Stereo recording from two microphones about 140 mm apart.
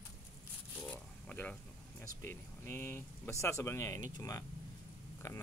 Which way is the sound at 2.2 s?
15° left (ahead or behind).